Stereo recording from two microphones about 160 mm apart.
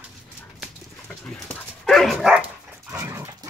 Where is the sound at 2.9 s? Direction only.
15° right (ahead or behind).